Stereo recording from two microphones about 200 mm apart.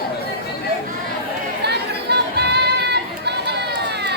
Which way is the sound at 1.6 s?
55° right (ahead or behind).